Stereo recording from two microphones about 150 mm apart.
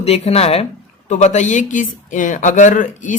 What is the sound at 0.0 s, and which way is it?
A woman's voice, 40° left (ahead or behind).